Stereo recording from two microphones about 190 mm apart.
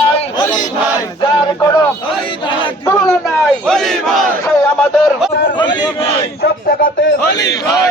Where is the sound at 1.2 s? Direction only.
20° left (ahead or behind).